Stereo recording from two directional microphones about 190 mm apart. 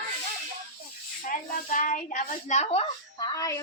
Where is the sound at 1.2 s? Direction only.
45° left (ahead or behind).